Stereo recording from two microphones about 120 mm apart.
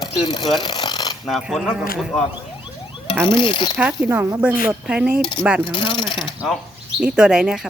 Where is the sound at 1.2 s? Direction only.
Centre (ahead or behind).